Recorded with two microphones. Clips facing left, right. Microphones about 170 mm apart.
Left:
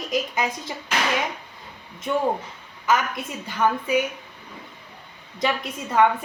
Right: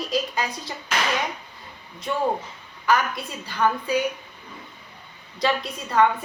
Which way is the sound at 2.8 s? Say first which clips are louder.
Even; 20° left (ahead or behind).